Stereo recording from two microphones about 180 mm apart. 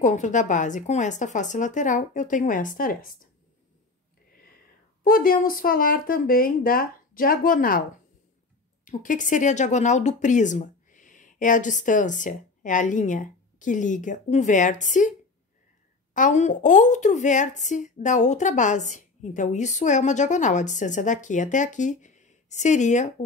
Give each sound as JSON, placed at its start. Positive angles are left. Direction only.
{"t": 0.0, "sound": "a woman's voice", "side_deg": 45}
{"t": 5.0, "sound": "a woman's voice", "side_deg": 50}
{"t": 8.8, "sound": "a woman's voice", "side_deg": 45}